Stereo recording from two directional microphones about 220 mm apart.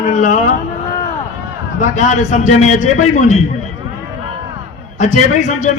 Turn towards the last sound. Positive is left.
turn(degrees=35)  # may be behind; listen again after turning